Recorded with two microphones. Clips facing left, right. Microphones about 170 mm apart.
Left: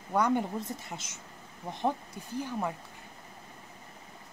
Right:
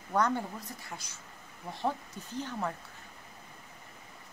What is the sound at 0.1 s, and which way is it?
Speech, 15° left (ahead or behind).